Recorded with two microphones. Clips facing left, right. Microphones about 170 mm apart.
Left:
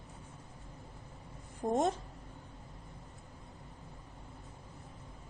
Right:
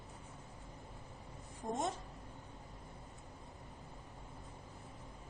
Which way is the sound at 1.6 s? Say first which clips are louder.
Left 9 dB; 55° left (ahead or behind).